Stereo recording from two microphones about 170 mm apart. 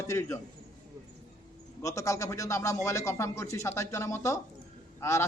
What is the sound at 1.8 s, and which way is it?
A man's voice, 20° left (ahead or behind).